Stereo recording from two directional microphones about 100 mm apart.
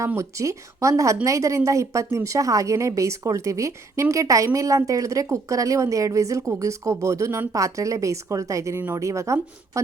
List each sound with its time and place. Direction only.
0.2 s a woman's voice: 30° right (ahead or behind)